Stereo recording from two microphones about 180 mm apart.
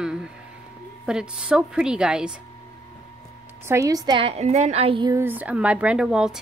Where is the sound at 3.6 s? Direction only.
20° right (ahead or behind).